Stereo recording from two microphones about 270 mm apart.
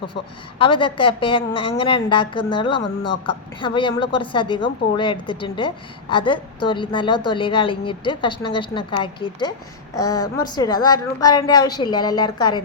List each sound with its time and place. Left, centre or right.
0.6 s a woman's voice: centre